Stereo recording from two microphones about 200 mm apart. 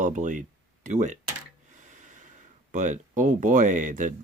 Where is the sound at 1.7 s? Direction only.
40° right (ahead or behind).